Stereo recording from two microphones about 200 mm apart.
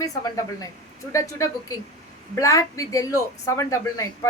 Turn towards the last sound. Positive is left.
turn(degrees=15)  # may be behind; listen again after turning